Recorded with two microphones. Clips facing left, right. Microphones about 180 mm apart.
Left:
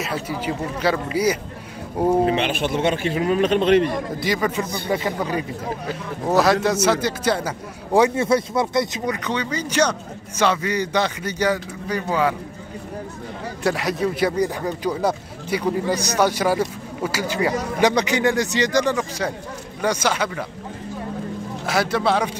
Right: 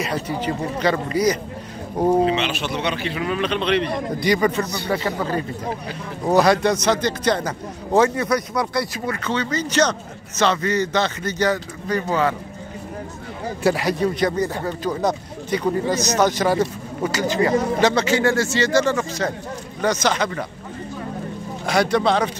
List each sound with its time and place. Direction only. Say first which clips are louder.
0.0 s speech: right 2 dB; 5° left (ahead or behind)
2.3 s speech: left 2 dB; 50° left (ahead or behind)
4.2 s speech: right 5 dB; centre (ahead or behind)
4.8 s speech: left 2 dB; 15° left (ahead or behind)
6.2 s speech: right 1 dB; centre (ahead or behind)
8.2 s speech: left 2 dB; 25° left (ahead or behind); by 12.4 s 10° left (ahead or behind)
13.6 s speech: right 2 dB; centre (ahead or behind)
21.6 s speech: right 2 dB; 5° left (ahead or behind)